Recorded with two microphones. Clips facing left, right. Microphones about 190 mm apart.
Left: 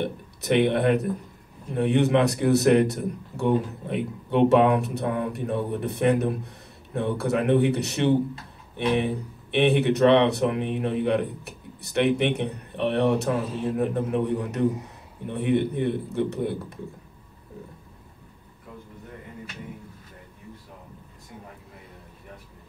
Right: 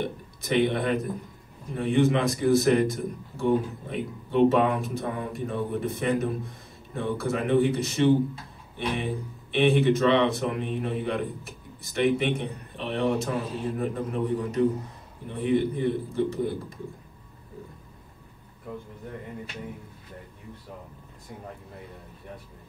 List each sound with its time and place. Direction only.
0.0 s a man's voice: 65° left (ahead or behind)